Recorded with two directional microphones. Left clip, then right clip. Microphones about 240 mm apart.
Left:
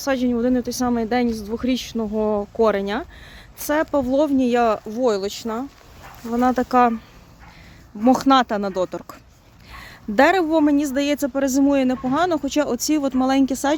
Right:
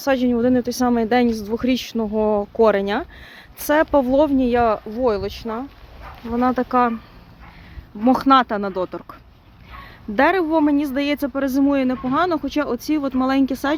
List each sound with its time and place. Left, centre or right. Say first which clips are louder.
0.0 s a woman's voice: right 3 dB; centre
8.0 s a woman's voice: right 1 dB; centre